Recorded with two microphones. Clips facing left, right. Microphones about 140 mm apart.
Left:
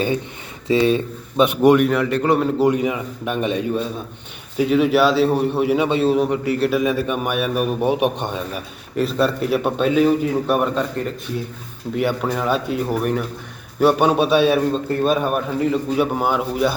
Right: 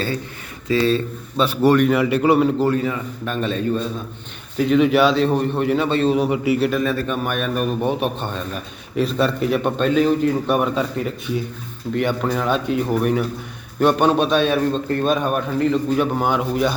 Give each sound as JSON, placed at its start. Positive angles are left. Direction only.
{"t": 0.7, "sound": "a man's voice", "side_deg": 15}
{"t": 1.9, "sound": "a man's voice", "side_deg": -5}
{"t": 2.6, "sound": "a man's voice", "side_deg": 15}
{"t": 6.7, "sound": "a man's voice", "side_deg": 10}
{"t": 9.0, "sound": "a man's voice", "side_deg": 0}